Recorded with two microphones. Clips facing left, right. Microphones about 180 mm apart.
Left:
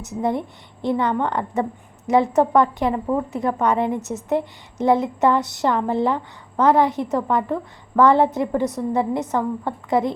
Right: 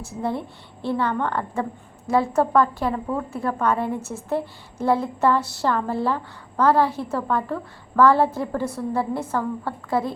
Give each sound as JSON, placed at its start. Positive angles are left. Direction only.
{"t": 0.0, "sound": "a woman's voice", "side_deg": 20}